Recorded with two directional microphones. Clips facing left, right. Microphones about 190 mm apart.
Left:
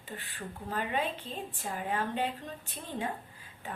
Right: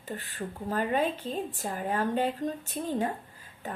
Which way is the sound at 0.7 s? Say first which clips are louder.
Right 5 dB; 40° right (ahead or behind).